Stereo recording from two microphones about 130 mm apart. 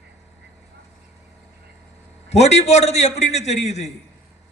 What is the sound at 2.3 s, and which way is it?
A man's voice, 55° left (ahead or behind).